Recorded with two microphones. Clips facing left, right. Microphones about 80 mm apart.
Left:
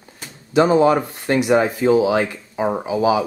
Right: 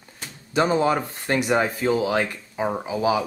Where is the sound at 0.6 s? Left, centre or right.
Centre.